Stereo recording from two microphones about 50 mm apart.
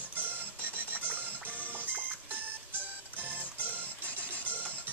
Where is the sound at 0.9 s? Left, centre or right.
Right.